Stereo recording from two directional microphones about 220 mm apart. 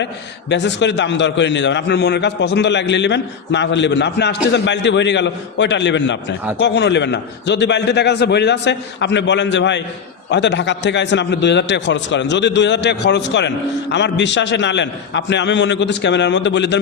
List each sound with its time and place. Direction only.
0.5 s a man's voice: 55° left (ahead or behind)